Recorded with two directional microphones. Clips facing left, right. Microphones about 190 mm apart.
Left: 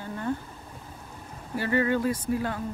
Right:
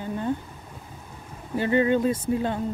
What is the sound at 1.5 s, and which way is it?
Speech, 20° right (ahead or behind).